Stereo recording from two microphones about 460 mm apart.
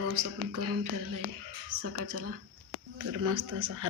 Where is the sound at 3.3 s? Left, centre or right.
Right.